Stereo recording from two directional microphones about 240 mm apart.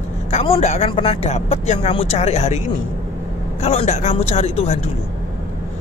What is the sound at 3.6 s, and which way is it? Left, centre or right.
Speech, left.